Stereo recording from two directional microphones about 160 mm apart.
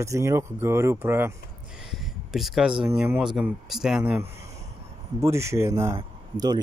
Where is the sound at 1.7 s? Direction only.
5° right (ahead or behind).